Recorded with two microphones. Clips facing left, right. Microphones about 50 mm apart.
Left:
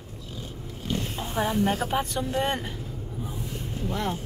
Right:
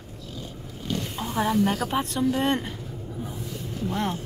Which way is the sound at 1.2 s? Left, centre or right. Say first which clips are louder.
Right 2 dB; centre.